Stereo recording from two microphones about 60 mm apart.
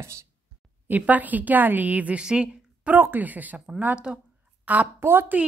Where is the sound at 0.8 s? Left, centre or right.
Right.